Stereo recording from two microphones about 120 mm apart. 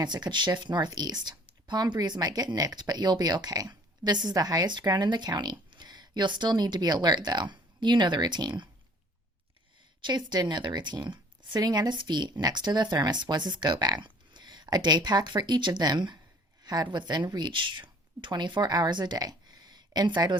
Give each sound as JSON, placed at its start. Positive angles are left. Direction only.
{"t": 0.0, "sound": "speech", "side_deg": -40}
{"t": 10.0, "sound": "speech", "side_deg": -40}